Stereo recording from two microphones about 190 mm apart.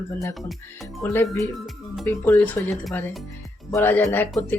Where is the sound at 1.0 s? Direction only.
15° left (ahead or behind).